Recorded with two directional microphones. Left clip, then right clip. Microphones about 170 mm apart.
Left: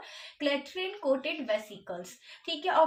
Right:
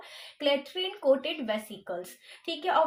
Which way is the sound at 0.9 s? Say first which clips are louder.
Right 4 dB; 35° right (ahead or behind).